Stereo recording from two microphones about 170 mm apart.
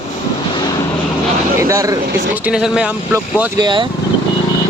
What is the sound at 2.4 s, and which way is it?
Speech, 5° right (ahead or behind).